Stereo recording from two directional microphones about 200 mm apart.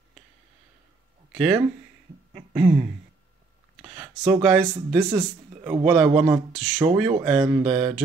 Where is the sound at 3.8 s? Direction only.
25° right (ahead or behind).